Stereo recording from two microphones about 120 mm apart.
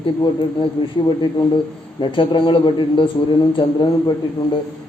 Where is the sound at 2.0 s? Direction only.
45° left (ahead or behind).